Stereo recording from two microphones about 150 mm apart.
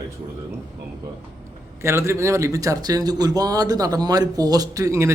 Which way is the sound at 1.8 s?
20° right (ahead or behind).